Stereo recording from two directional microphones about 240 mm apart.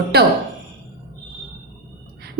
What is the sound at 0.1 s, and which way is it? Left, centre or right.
Speech, right.